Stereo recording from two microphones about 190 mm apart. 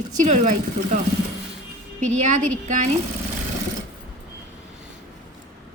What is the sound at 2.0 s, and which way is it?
Speech, 40° right (ahead or behind).